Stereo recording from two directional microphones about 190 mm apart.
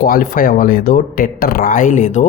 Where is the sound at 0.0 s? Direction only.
50° left (ahead or behind).